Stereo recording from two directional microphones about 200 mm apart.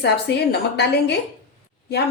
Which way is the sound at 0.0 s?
55° left (ahead or behind).